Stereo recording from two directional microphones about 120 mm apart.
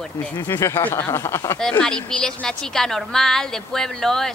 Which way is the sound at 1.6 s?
5° left (ahead or behind).